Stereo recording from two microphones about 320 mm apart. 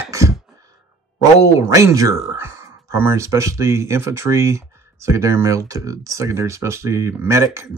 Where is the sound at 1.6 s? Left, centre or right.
Centre.